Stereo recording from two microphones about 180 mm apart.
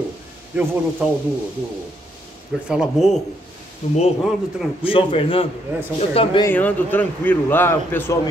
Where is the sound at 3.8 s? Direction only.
35° left (ahead or behind).